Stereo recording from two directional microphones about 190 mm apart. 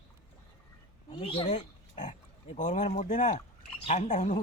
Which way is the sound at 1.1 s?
30° left (ahead or behind).